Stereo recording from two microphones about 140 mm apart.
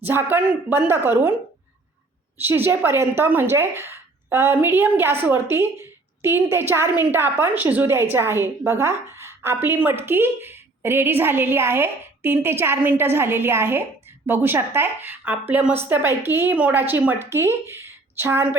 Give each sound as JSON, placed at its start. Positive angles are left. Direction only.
{"t": 0.0, "sound": "a woman's voice", "side_deg": -15}
{"t": 2.4, "sound": "a woman's voice", "side_deg": -15}